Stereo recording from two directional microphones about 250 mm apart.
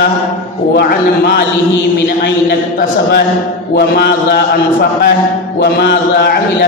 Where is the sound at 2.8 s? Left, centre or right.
Left.